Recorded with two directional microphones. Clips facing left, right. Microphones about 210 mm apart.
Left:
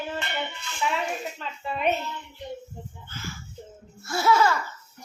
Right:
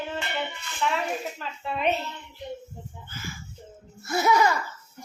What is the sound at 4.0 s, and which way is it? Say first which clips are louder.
Speech: even; 20° right (ahead or behind).